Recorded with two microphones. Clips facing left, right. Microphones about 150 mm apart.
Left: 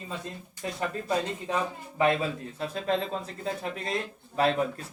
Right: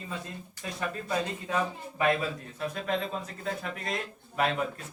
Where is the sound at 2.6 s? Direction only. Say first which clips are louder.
Left 2 dB; 30° left (ahead or behind).